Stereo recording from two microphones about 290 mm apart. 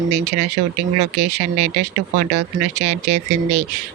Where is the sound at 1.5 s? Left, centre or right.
Right.